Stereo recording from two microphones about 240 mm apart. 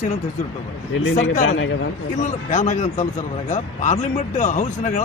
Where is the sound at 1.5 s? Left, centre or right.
Left.